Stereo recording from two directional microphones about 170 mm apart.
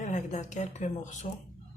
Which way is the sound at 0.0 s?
45° left (ahead or behind).